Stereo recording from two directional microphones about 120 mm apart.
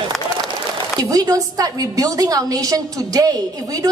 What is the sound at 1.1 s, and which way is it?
A woman's voice, 30° right (ahead or behind).